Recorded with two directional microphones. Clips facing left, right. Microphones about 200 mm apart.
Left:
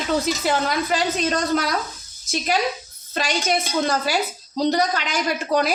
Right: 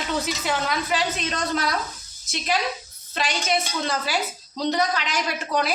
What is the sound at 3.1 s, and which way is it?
A woman's voice, 45° left (ahead or behind).